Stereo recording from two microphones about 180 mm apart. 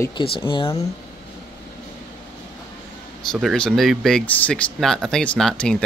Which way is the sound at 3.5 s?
5° left (ahead or behind).